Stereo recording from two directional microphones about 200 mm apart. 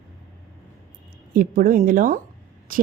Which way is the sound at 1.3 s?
45° right (ahead or behind).